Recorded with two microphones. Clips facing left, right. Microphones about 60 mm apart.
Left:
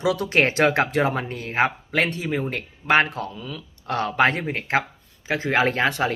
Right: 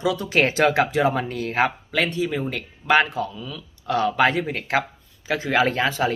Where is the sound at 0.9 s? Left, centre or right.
Left.